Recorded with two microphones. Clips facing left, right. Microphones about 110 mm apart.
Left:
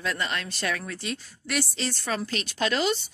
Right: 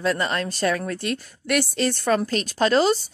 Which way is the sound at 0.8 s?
55° right (ahead or behind).